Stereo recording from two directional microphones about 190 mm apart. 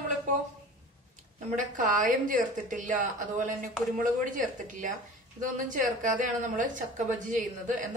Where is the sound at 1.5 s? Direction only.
45° right (ahead or behind).